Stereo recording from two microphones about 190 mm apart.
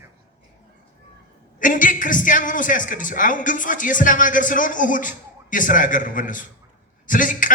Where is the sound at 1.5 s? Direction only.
45° left (ahead or behind).